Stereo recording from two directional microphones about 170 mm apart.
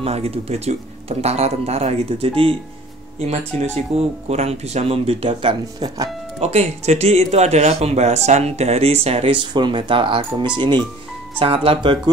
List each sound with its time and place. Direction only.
0.0 s speech: 35° right (ahead or behind)
6.4 s speech: 40° right (ahead or behind)